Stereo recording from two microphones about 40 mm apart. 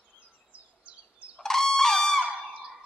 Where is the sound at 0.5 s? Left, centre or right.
Right.